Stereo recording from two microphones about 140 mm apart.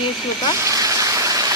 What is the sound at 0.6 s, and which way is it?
Vehicle, 25° right (ahead or behind).